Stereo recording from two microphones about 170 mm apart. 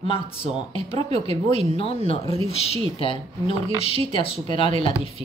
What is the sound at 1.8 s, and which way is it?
Speech, 35° left (ahead or behind).